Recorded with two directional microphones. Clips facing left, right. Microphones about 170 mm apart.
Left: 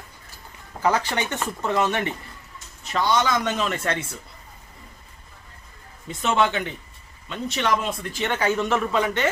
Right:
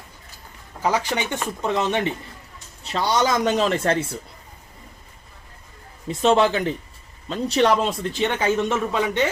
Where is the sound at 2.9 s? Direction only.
35° right (ahead or behind).